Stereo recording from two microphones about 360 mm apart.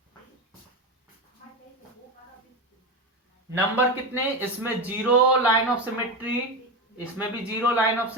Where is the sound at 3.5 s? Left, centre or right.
Centre.